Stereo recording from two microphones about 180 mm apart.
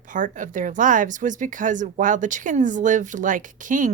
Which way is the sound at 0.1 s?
45° right (ahead or behind).